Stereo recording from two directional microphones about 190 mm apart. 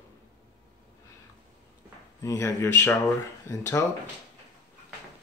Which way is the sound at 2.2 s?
15° left (ahead or behind).